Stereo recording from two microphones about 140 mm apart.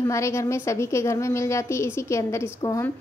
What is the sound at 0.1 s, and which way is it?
A woman's voice, 20° left (ahead or behind).